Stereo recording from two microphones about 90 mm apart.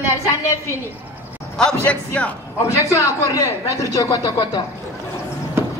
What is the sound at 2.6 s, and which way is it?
Speech, 35° left (ahead or behind).